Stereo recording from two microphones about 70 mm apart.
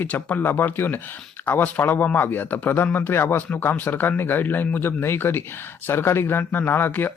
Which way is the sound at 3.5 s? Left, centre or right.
Left.